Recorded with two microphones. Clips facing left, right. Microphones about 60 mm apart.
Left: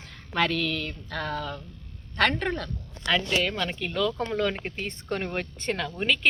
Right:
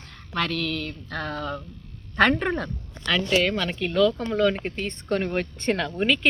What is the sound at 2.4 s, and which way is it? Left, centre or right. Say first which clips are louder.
Speech: right 3 dB; centre.